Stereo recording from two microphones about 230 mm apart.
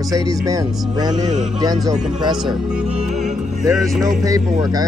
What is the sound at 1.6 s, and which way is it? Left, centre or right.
Speech, centre.